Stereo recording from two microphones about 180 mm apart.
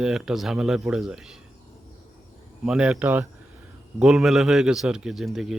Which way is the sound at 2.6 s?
5° right (ahead or behind).